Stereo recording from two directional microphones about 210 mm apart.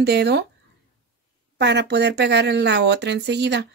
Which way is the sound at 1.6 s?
55° right (ahead or behind).